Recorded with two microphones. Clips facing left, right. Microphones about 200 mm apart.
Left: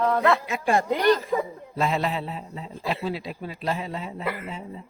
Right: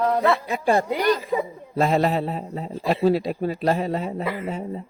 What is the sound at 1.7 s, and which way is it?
Speech, 45° right (ahead or behind).